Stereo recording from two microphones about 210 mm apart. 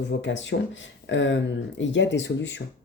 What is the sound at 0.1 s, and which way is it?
Speech, 60° left (ahead or behind).